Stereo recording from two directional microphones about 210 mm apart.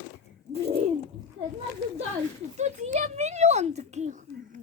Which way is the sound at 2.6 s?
35° right (ahead or behind).